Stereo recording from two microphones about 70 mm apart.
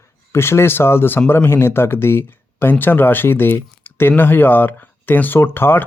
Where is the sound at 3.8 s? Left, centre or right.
Left.